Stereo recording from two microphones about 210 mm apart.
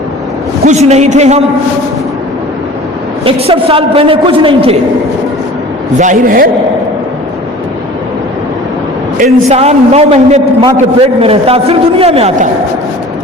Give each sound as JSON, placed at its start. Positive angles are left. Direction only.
{"t": 0.6, "sound": "a man's voice", "side_deg": -35}
{"t": 3.2, "sound": "a man's voice", "side_deg": -25}
{"t": 6.0, "sound": "a man's voice", "side_deg": -40}
{"t": 9.1, "sound": "a man's voice", "side_deg": -30}